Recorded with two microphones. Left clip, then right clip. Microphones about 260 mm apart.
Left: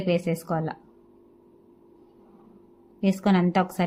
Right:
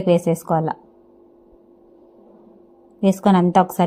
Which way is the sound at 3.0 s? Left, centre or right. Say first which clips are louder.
Right 7 dB; centre.